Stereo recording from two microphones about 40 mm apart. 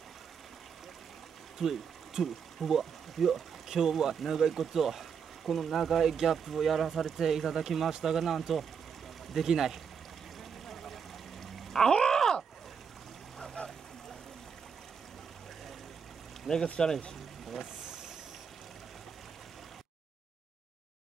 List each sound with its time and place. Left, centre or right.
1.6 s speech: centre
10.7 s a sound: centre
11.7 s groan: centre
13.6 s boat: left
16.5 s speech: centre